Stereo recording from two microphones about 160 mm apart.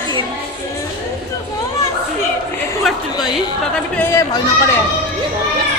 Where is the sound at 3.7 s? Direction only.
10° left (ahead or behind).